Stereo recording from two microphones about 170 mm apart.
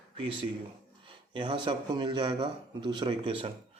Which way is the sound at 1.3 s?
30° right (ahead or behind).